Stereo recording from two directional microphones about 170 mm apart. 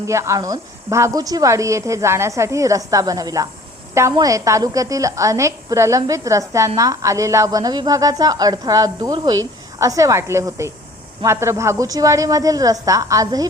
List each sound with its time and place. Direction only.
0.0 s a woman's voice: 15° right (ahead or behind)